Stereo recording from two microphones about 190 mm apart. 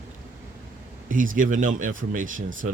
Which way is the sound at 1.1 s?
45° right (ahead or behind).